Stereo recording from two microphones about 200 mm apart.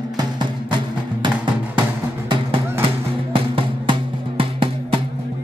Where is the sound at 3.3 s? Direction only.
25° right (ahead or behind).